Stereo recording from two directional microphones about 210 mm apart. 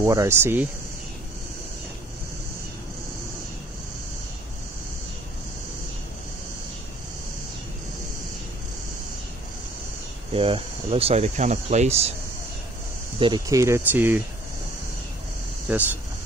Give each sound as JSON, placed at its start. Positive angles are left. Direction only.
{"t": 0.0, "sound": "speech", "side_deg": -15}
{"t": 10.3, "sound": "speech", "side_deg": -25}
{"t": 13.2, "sound": "speech", "side_deg": -20}
{"t": 15.7, "sound": "speech", "side_deg": -5}